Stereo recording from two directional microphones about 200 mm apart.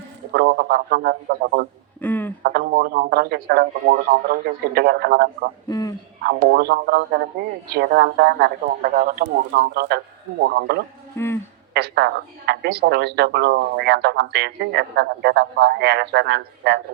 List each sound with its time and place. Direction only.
0.3 s speech: 55° right (ahead or behind)
2.0 s a sound: 10° left (ahead or behind)
2.4 s speech: 50° right (ahead or behind)
5.6 s a man's voice: 15° left (ahead or behind)
6.2 s speech: 50° right (ahead or behind)
11.2 s speech: 15° left (ahead or behind)
11.7 s speech: 55° right (ahead or behind)